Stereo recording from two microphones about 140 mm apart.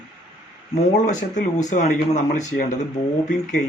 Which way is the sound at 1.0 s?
60° left (ahead or behind).